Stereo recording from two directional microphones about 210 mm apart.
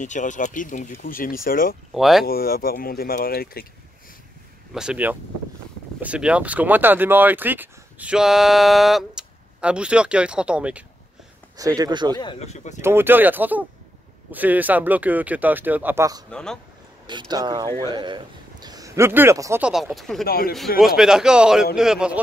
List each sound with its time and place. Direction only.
0.0 s speech: 35° left (ahead or behind)
2.0 s speech: centre (ahead or behind)
2.2 s speech: 45° left (ahead or behind)
4.7 s speech: 5° right (ahead or behind)
11.5 s speech: 15° right (ahead or behind)
12.2 s speech: 25° left (ahead or behind)
12.8 s speech: 10° right (ahead or behind)
16.3 s speech: 5° left (ahead or behind)
17.0 s a man's voice: 20° right (ahead or behind); by 20.2 s centre (ahead or behind)
20.2 s speech: 45° left (ahead or behind)
20.8 s speech: centre (ahead or behind)